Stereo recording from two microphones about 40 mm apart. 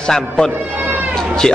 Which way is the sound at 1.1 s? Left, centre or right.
Centre.